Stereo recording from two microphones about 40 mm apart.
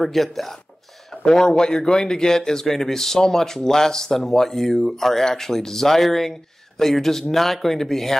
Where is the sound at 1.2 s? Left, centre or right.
Centre.